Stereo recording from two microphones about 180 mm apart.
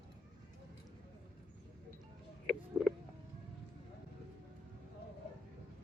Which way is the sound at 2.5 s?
Centre (ahead or behind).